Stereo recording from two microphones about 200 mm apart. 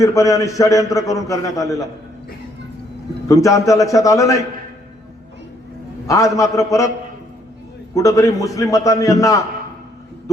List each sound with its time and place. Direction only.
0.0 s a man's voice: 15° left (ahead or behind)
3.2 s a man's voice: 15° left (ahead or behind)
6.1 s a man's voice: 15° left (ahead or behind)
7.9 s a man's voice: 15° left (ahead or behind)